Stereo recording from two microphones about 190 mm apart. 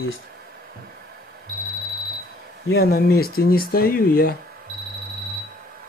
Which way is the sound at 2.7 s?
55° left (ahead or behind).